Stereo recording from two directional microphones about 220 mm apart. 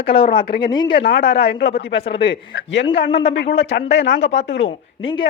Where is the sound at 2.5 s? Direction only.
55° left (ahead or behind).